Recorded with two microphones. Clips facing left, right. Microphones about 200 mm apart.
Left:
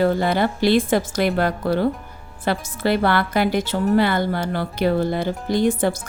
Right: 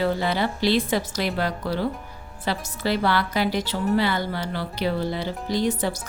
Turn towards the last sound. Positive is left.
turn(degrees=50)  # may be behind; listen again after turning